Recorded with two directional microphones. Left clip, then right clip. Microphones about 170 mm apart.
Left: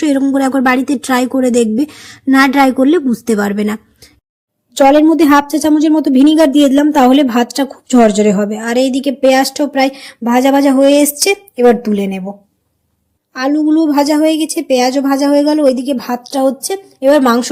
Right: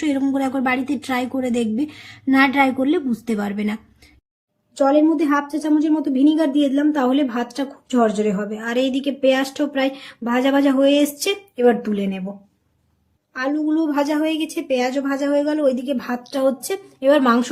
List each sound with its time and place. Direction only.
0.0 s a woman's voice: 30° left (ahead or behind)
13.3 s a woman's voice: 35° left (ahead or behind)